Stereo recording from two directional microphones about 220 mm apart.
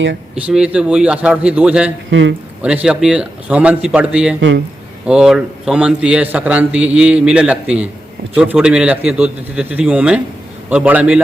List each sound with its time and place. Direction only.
0.4 s a man's voice: 5° right (ahead or behind)
2.0 s speech: 60° right (ahead or behind)
2.6 s a man's voice: 5° right (ahead or behind)
4.4 s speech: 60° right (ahead or behind)
5.0 s a man's voice: 5° right (ahead or behind)